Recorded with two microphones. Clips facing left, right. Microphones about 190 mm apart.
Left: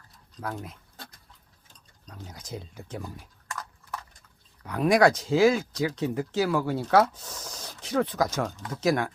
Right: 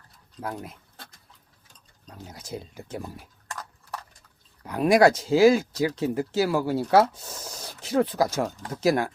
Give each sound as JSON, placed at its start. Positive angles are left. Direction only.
{"t": 0.3, "sound": "speech", "side_deg": -10}
{"t": 2.0, "sound": "speech", "side_deg": -5}
{"t": 4.6, "sound": "speech", "side_deg": -5}